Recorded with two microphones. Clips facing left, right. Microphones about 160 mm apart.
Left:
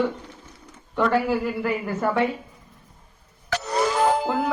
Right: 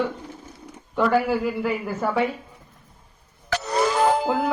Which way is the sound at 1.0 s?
Centre (ahead or behind).